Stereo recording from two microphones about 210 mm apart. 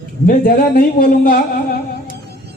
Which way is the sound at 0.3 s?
45° left (ahead or behind).